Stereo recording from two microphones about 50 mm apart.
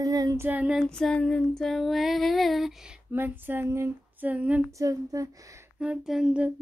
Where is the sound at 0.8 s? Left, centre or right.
Centre.